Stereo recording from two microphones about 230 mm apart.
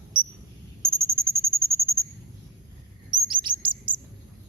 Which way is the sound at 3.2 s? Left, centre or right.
Right.